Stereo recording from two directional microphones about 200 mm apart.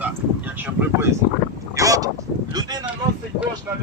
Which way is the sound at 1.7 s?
15° right (ahead or behind).